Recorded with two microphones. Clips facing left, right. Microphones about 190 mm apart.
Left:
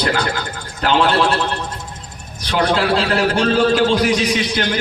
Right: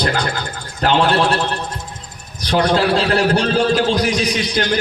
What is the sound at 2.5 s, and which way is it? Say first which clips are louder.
A man's voice: right 1 dB; 40° right (ahead or behind).